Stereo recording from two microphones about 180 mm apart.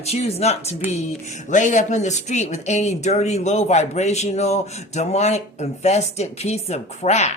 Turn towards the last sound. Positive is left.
turn(degrees=40)  # may be behind; listen again after turning